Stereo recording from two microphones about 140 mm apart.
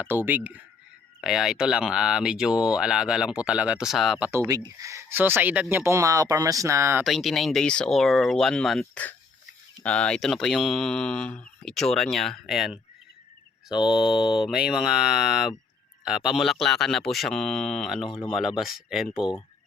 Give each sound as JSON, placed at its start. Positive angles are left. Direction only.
{"t": 0.0, "sound": "speech", "side_deg": -15}
{"t": 4.3, "sound": "speech", "side_deg": -20}
{"t": 7.0, "sound": "speech", "side_deg": 0}
{"t": 13.7, "sound": "mantra", "side_deg": 35}
{"t": 14.4, "sound": "speech", "side_deg": -5}